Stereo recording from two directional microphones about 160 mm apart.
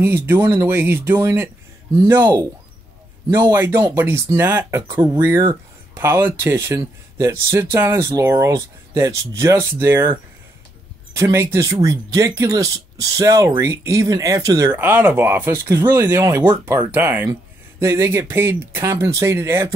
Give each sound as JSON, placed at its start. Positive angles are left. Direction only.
{"t": 0.0, "sound": "speech", "side_deg": -15}
{"t": 3.3, "sound": "speech", "side_deg": -15}
{"t": 11.1, "sound": "speech", "side_deg": -20}